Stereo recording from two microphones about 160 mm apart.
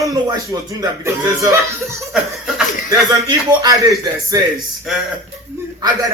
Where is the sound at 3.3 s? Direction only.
25° right (ahead or behind).